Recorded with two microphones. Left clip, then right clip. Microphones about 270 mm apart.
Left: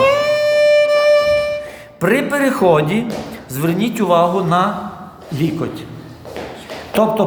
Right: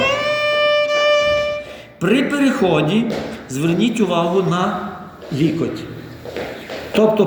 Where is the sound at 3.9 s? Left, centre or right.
Left.